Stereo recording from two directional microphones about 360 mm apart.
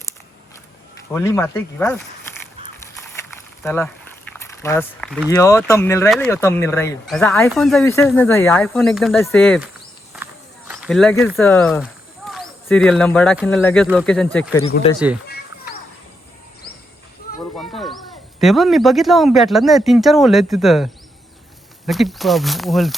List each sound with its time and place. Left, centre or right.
1.1 s speech: centre
3.6 s speech: centre
10.1 s walk: centre
10.7 s speech: centre
14.7 s speech: left
17.6 s speech: centre